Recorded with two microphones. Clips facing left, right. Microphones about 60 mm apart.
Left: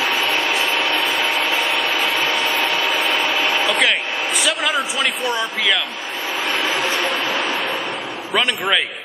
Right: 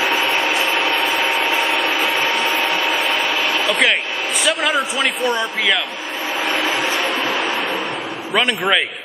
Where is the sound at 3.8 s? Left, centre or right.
Centre.